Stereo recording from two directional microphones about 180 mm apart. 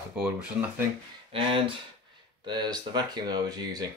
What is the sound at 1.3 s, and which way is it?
Speech, 30° right (ahead or behind).